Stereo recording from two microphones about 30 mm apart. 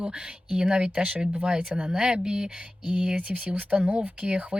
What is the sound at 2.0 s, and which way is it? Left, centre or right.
Speech, right.